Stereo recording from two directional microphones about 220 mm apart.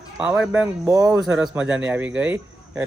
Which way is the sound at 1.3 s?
5° right (ahead or behind).